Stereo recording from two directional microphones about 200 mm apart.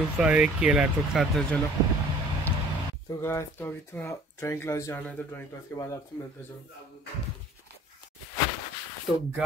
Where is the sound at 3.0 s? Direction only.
15° left (ahead or behind).